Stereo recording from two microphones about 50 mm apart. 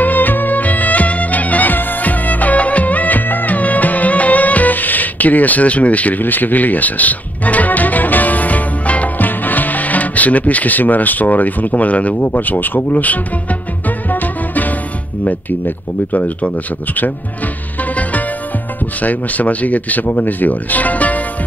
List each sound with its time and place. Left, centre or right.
0.0 s music: left
15.2 s speech: left
18.9 s speech: left